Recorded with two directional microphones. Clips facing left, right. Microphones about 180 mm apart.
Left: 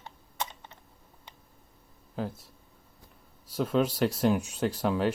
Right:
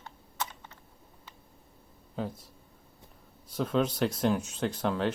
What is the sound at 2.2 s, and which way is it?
Speech, centre (ahead or behind).